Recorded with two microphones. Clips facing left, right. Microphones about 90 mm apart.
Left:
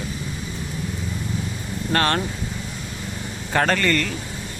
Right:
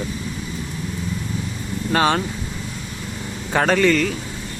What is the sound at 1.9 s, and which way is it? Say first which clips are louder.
Speech: right 3 dB; 5° right (ahead or behind).